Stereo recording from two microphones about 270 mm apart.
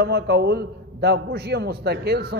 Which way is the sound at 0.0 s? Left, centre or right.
Right.